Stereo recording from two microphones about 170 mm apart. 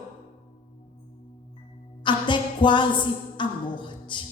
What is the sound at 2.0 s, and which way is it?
A woman's voice, 30° left (ahead or behind).